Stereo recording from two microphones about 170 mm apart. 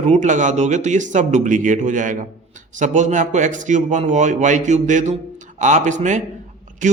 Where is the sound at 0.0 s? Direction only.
45° right (ahead or behind).